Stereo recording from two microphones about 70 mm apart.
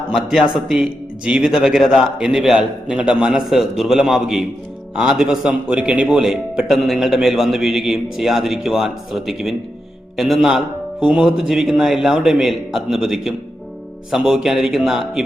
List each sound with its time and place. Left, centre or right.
0.1 s a man's voice: centre
11.0 s a man's voice: centre